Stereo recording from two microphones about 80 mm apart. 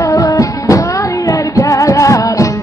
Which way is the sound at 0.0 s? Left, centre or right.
Left.